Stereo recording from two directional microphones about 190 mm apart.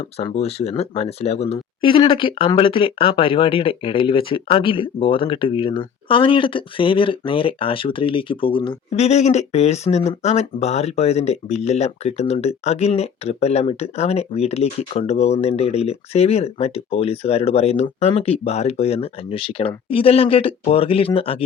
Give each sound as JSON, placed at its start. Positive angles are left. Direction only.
{"t": 0.0, "sound": "speech", "side_deg": 30}